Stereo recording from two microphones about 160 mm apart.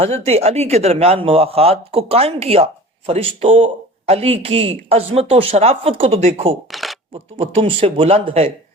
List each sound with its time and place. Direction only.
0.0 s speech: 40° right (ahead or behind)
6.7 s a sound: centre (ahead or behind)
7.1 s speech: 35° right (ahead or behind)